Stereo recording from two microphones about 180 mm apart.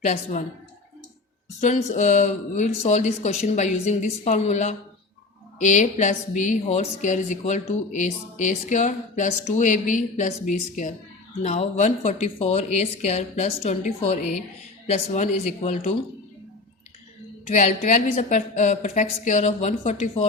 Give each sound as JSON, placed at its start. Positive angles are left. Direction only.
{"t": 1.6, "sound": "a woman's voice", "side_deg": 40}
{"t": 11.4, "sound": "speech", "side_deg": 40}
{"t": 17.5, "sound": "a woman's voice", "side_deg": 45}